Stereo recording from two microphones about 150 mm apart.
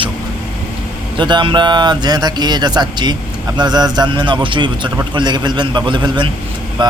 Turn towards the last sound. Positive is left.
turn(degrees=-30)  # may be behind; listen again after turning